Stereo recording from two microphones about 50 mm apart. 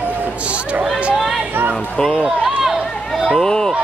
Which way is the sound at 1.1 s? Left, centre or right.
Centre.